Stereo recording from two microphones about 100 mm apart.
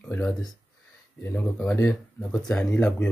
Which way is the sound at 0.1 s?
15° left (ahead or behind).